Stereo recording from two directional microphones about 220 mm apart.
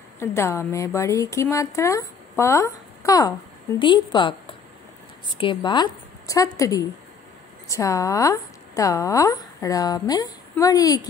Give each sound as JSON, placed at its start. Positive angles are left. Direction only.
{"t": 0.2, "sound": "a woman's voice", "side_deg": 10}